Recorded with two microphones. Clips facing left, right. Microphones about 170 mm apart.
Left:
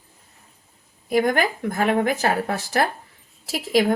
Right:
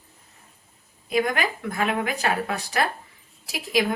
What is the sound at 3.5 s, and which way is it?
Speech, 50° left (ahead or behind).